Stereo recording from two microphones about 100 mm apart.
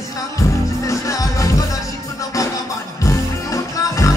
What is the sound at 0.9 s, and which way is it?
Music, 30° left (ahead or behind).